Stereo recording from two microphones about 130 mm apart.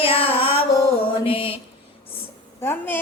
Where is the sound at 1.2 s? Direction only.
45° left (ahead or behind).